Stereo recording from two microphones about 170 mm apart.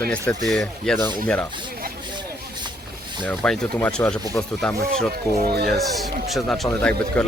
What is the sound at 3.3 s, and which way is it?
Speech, 5° left (ahead or behind).